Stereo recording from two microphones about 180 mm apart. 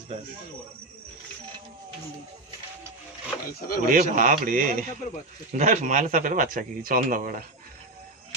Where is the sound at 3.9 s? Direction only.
50° right (ahead or behind).